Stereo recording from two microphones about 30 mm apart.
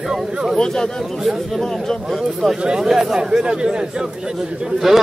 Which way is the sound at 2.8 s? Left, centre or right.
Centre.